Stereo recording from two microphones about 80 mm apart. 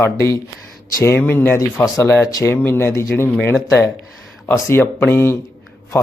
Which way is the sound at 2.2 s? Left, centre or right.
Left.